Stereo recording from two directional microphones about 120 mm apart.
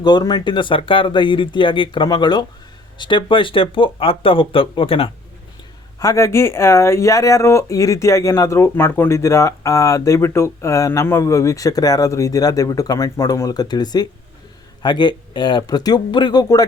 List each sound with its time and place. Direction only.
0.0 s speech: 35° left (ahead or behind)
6.0 s speech: 25° left (ahead or behind)